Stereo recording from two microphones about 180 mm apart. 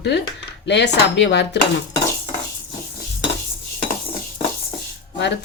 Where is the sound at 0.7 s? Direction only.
70° left (ahead or behind).